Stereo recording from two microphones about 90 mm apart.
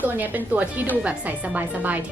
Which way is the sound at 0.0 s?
20° right (ahead or behind).